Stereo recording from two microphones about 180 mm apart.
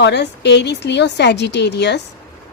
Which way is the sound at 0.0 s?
70° left (ahead or behind).